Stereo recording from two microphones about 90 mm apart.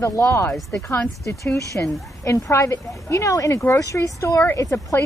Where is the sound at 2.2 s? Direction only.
35° left (ahead or behind).